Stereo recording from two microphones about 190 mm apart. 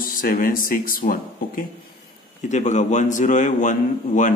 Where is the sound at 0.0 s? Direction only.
50° left (ahead or behind).